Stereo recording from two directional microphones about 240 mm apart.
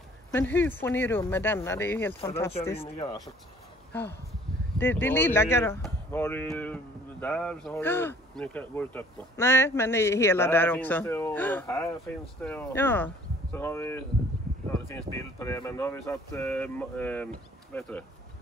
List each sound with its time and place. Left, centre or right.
0.3 s speech: centre
2.7 s speech: left
3.9 s speech: centre
15.1 s speech: centre